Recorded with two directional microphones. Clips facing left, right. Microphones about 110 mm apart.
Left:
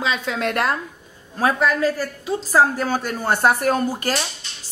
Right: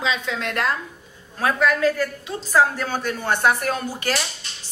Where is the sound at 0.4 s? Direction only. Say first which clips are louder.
Left 3 dB; 50° left (ahead or behind).